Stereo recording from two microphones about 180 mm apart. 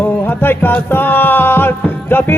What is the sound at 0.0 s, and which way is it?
Music, 10° left (ahead or behind).